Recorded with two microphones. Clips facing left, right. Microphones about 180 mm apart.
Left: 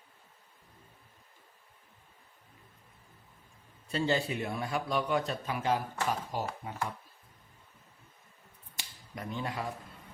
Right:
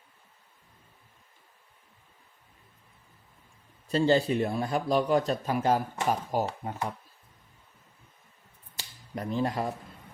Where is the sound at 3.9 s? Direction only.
35° right (ahead or behind).